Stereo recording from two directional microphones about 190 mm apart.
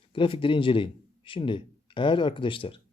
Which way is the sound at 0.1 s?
25° left (ahead or behind).